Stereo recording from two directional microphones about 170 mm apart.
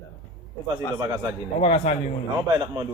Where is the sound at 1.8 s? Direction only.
45° left (ahead or behind).